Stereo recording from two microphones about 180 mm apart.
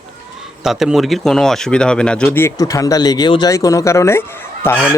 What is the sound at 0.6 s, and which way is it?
Speech, centre (ahead or behind).